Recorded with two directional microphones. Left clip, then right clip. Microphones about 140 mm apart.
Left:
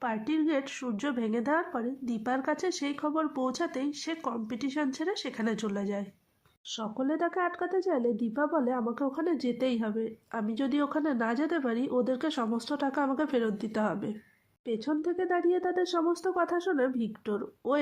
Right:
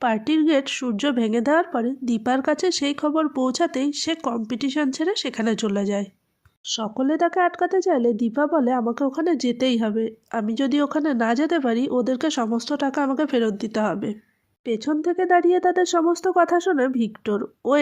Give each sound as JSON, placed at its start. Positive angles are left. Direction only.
{"t": 0.0, "sound": "speech", "side_deg": -35}